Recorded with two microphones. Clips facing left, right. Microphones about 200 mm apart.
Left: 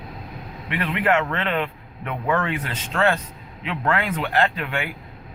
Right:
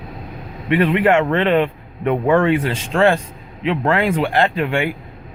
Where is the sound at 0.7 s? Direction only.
30° right (ahead or behind).